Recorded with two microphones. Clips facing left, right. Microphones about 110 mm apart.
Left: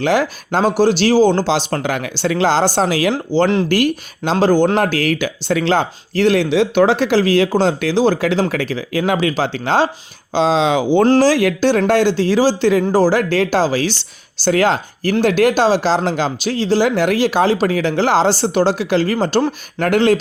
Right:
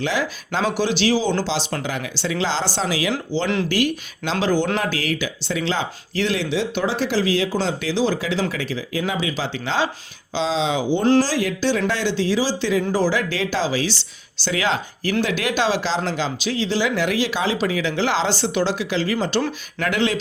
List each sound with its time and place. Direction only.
0.0 s speech: 50° left (ahead or behind); by 11.0 s 70° left (ahead or behind)
11.0 s speech: 55° left (ahead or behind)